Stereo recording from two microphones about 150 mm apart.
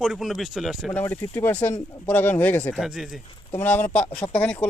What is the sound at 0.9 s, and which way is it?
Speech, 15° left (ahead or behind).